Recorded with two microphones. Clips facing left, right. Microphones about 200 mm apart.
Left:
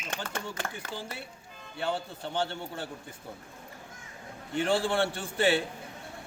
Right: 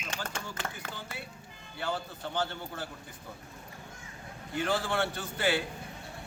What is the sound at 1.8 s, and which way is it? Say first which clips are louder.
A man's voice: left 2 dB; 30° left (ahead or behind).